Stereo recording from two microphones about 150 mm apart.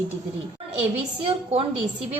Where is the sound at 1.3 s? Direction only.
40° right (ahead or behind).